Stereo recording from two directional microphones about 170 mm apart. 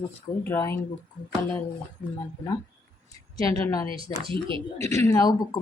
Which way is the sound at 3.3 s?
20° left (ahead or behind).